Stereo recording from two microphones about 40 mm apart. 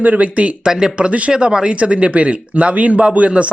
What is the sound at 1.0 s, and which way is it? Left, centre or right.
Speech, right.